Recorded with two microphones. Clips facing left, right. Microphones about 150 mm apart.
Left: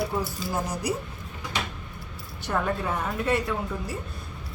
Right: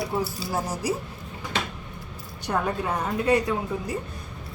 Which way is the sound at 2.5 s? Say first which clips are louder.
Right 1 dB; 15° right (ahead or behind).